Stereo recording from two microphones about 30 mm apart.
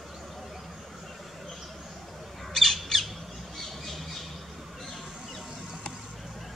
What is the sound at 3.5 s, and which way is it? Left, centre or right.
Squawk, centre.